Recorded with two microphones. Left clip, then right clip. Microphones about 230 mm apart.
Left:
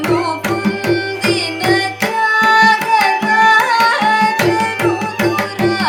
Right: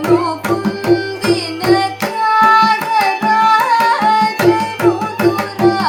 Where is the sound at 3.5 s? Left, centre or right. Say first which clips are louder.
Even; left.